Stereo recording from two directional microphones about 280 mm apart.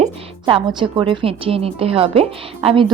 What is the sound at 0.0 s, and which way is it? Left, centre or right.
A woman's voice, centre.